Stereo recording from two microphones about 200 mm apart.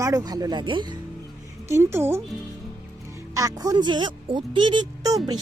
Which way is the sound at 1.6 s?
15° right (ahead or behind).